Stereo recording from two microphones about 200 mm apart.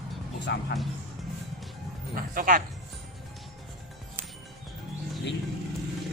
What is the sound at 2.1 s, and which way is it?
Speech, 45° right (ahead or behind).